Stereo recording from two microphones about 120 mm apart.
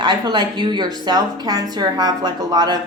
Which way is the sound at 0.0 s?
40° right (ahead or behind).